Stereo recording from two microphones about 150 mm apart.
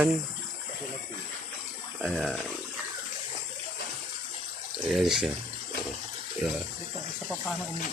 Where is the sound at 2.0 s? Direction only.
Centre (ahead or behind).